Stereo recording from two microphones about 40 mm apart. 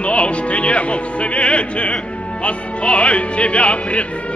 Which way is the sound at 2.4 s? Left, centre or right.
Left.